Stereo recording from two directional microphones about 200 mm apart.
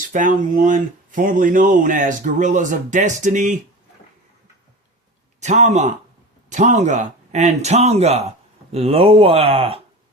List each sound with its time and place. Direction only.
0.0 s speech: 40° right (ahead or behind)
5.4 s speech: 35° right (ahead or behind)